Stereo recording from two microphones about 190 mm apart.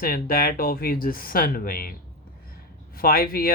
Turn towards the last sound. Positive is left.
turn(degrees=50)  # may be behind; listen again after turning